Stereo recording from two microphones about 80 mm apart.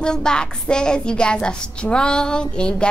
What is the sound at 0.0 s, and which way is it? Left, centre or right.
A woman's voice, centre.